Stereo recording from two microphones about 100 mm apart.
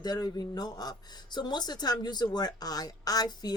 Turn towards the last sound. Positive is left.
turn(degrees=40)  # may be behind; listen again after turning